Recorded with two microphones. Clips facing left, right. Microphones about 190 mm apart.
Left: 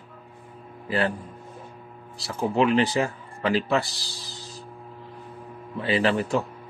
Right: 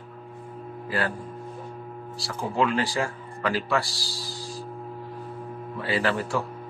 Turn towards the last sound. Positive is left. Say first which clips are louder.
# left 3 dB
turn(degrees=20)  # may be behind; listen again after turning